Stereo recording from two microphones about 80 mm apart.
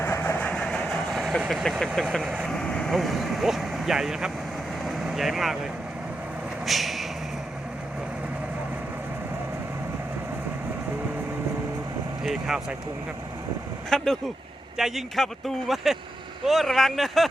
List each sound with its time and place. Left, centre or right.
0.0 s vehicle: left
0.3 s vehicle: centre
2.0 s a man's voice: centre
2.2 s speech: centre
2.5 s speech: centre
4.9 s vehicle: centre
6.7 s a sound: centre
12.2 s speech: centre
13.9 s a man's voice: centre